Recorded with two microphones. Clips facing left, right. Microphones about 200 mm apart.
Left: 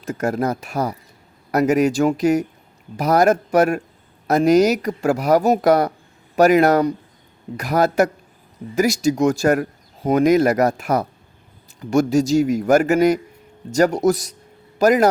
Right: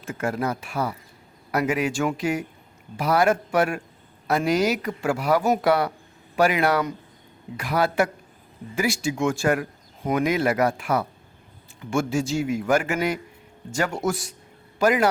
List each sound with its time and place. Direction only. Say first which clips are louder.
0.0 s speech: left 5 dB; 40° left (ahead or behind)